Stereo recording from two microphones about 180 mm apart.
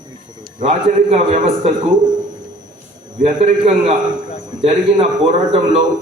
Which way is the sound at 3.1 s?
40° right (ahead or behind).